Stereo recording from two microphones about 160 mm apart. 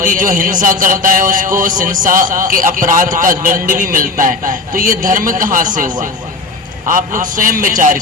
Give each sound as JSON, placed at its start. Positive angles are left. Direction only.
{"t": 0.0, "sound": "a man's voice", "side_deg": -55}